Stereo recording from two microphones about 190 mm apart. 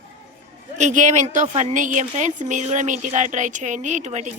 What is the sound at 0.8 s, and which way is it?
Speech, 40° right (ahead or behind).